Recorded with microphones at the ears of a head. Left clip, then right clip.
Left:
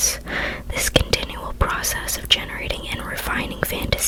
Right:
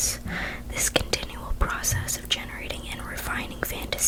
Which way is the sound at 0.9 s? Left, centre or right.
Left.